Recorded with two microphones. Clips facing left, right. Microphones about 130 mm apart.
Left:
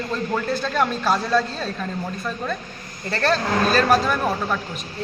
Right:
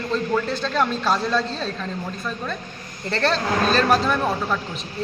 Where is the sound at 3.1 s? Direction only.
5° left (ahead or behind).